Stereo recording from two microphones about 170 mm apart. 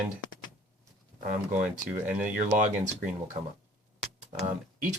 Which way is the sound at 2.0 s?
10° right (ahead or behind).